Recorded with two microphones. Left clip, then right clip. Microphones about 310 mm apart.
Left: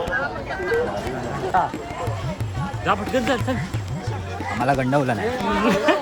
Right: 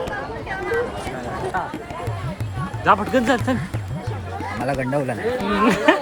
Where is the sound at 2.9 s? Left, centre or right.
Centre.